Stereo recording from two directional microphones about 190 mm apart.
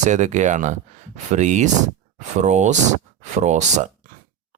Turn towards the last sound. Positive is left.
turn(degrees=-40)  # may be behind; listen again after turning